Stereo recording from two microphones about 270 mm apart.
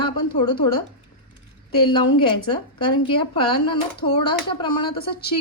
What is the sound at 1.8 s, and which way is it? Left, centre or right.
A woman's voice, centre.